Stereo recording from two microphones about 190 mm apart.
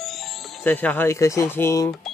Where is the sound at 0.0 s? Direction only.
Centre (ahead or behind).